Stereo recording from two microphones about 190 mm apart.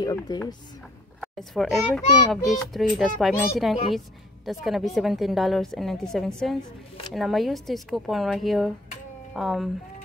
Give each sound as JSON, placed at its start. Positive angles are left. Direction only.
{"t": 0.0, "sound": "speech", "side_deg": 15}
{"t": 1.2, "sound": "a child's voice", "side_deg": 0}